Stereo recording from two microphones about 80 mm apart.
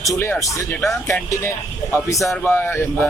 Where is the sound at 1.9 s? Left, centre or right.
Left.